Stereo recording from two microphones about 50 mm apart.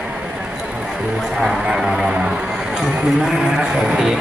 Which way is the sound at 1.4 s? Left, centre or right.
Centre.